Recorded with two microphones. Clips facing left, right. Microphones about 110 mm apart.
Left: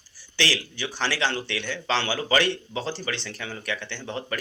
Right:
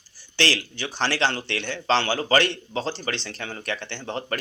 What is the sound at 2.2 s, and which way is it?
Speech, 40° right (ahead or behind).